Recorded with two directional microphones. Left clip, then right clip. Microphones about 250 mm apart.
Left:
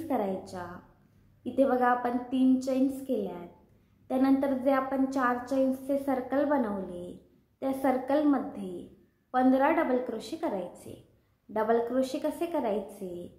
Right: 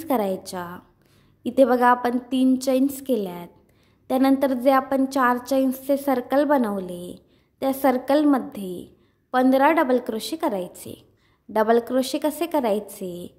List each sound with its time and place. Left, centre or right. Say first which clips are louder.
0.1 s a woman's voice: right 8 dB; right